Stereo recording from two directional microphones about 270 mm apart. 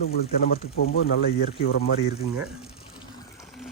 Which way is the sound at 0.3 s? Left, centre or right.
Left.